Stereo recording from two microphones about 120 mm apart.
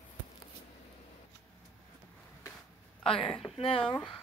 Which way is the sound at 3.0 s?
50° left (ahead or behind).